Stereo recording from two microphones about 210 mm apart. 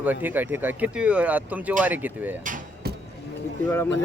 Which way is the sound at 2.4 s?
40° right (ahead or behind).